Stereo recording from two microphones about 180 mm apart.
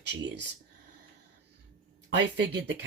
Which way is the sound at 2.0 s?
75° right (ahead or behind).